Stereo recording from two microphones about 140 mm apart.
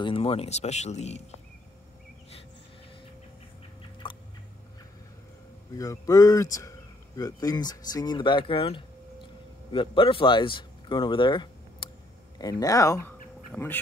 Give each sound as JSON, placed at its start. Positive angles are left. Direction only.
{"t": 0.0, "sound": "speech", "side_deg": 40}
{"t": 4.0, "sound": "a sound", "side_deg": 35}
{"t": 5.8, "sound": "a man's voice", "side_deg": 25}